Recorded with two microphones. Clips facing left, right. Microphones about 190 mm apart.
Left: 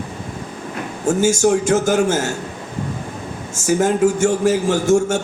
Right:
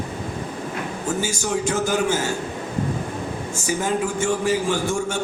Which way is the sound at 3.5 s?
45° left (ahead or behind).